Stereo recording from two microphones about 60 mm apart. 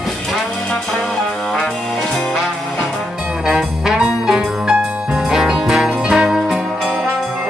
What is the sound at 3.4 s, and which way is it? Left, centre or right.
Music, centre.